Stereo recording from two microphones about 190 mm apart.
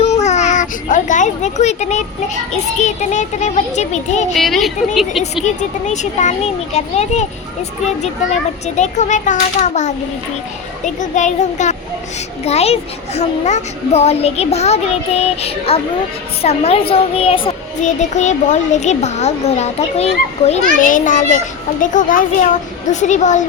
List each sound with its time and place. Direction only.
0.0 s a sound: 35° left (ahead or behind)
2.7 s a child's voice: 40° left (ahead or behind)
4.4 s speech: centre (ahead or behind)
5.5 s a child's voice: 40° left (ahead or behind)
8.6 s a child's voice: 40° left (ahead or behind)